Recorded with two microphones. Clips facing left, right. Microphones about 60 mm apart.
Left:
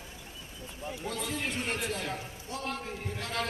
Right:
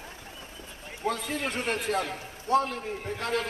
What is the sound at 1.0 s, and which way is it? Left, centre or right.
A man's voice, right.